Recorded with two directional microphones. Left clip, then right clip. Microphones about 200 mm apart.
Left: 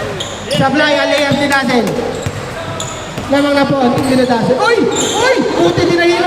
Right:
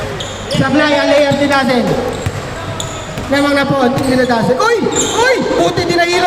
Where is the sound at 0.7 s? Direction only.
20° left (ahead or behind).